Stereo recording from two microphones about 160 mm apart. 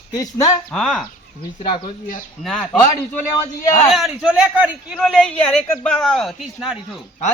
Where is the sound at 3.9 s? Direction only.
Centre (ahead or behind).